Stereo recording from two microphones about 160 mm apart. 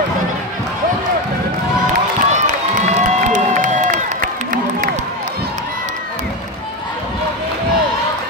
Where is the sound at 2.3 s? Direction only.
50° right (ahead or behind).